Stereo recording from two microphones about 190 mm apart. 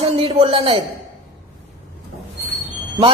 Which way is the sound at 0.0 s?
30° right (ahead or behind).